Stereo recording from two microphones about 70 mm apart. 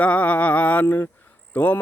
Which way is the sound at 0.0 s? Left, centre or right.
Left.